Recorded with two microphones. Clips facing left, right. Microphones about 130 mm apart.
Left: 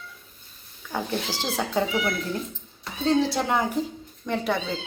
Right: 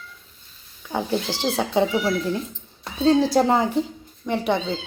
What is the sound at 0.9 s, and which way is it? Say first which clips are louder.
Speech: right 4 dB; 20° right (ahead or behind).